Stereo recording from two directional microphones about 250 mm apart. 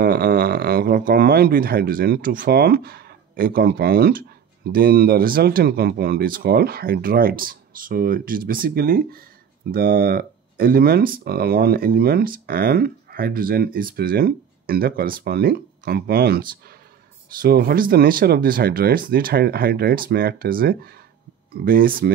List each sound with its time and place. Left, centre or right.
0.0 s speech: right